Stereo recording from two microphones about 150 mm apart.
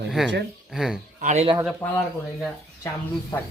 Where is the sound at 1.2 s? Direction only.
55° right (ahead or behind).